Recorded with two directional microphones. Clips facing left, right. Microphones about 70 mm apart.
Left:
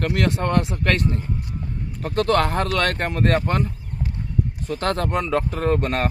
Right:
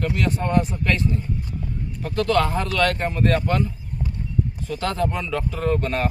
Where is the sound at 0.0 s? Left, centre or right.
Left.